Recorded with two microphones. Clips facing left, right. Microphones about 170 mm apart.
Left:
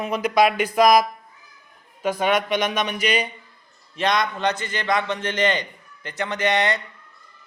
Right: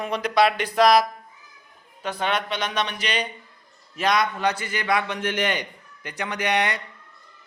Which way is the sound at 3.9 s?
5° right (ahead or behind).